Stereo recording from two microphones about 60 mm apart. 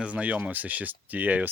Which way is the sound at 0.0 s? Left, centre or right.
Right.